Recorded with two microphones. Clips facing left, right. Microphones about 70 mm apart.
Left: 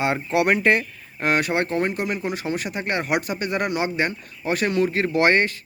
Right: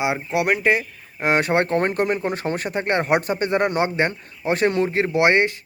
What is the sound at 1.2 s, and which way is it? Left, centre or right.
Speech, right.